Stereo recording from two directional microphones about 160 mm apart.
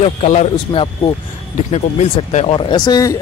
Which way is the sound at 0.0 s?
40° left (ahead or behind).